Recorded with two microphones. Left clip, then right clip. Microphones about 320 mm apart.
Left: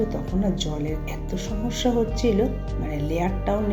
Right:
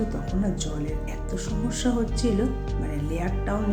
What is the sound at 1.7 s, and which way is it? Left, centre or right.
Speech, centre.